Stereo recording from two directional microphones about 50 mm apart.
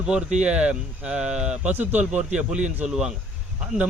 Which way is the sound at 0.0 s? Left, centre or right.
Centre.